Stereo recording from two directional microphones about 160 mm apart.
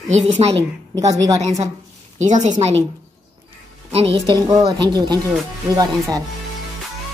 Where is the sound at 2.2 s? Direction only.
45° right (ahead or behind).